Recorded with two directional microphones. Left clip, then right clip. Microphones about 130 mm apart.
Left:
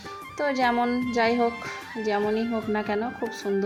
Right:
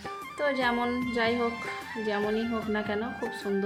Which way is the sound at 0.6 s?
25° left (ahead or behind).